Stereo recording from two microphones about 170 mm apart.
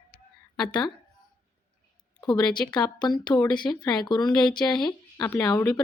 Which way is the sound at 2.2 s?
25° left (ahead or behind).